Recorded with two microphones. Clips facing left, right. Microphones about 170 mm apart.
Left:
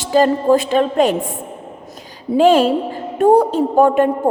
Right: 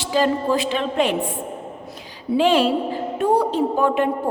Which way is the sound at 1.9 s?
45° left (ahead or behind).